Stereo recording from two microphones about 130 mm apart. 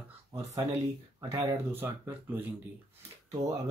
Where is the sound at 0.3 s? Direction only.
25° right (ahead or behind).